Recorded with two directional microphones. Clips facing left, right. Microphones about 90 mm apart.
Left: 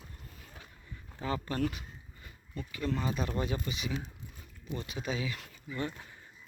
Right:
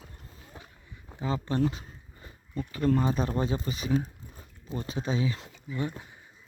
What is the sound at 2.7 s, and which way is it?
Speech, 40° right (ahead or behind).